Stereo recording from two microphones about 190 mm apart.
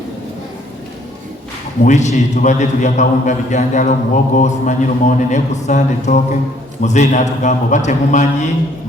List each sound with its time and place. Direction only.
1.8 s a man's voice: 40° left (ahead or behind)